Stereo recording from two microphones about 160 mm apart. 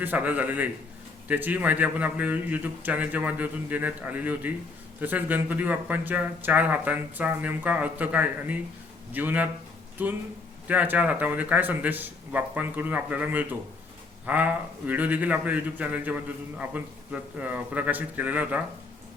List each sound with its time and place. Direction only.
0.0 s a man's voice: 10° right (ahead or behind)